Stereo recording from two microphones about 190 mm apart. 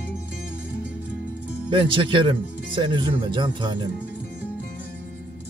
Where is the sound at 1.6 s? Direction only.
25° right (ahead or behind).